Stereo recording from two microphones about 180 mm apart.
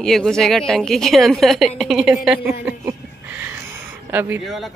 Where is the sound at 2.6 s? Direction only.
10° right (ahead or behind).